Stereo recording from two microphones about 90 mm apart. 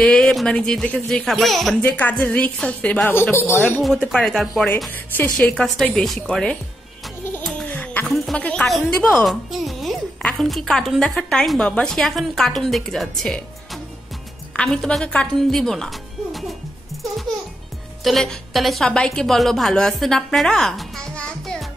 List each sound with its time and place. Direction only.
0.0 s a woman's voice: 10° left (ahead or behind)
1.8 s speech: 20° left (ahead or behind)
3.1 s speech: 25° left (ahead or behind)
3.8 s a woman's voice: centre (ahead or behind)
4.9 s speech: 20° left (ahead or behind)
5.4 s speech: 10° left (ahead or behind)
7.7 s a sound: 20° left (ahead or behind)
8.4 s speech: 15° left (ahead or behind)
8.6 s a woman's voice: centre (ahead or behind)
14.5 s a woman's voice: 10° left (ahead or behind)
18.0 s a woman's voice: 5° left (ahead or behind)